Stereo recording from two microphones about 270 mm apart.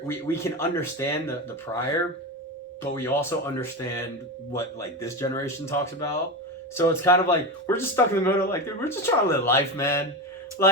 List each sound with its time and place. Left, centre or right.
0.1 s speech: centre
2.9 s speech: centre